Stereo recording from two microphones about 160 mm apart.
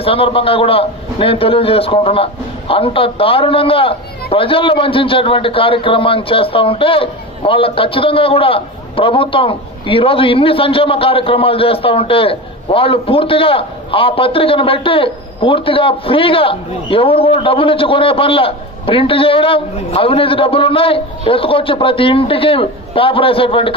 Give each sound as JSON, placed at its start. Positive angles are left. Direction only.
{"t": 0.0, "sound": "a man's voice", "side_deg": 35}